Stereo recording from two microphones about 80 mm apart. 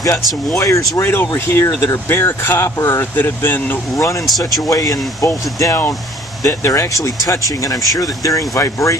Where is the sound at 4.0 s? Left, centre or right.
Left.